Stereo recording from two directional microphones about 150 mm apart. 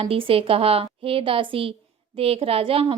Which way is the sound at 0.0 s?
35° right (ahead or behind).